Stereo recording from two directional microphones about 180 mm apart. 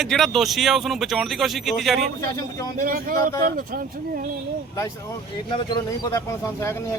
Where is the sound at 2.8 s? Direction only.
50° right (ahead or behind).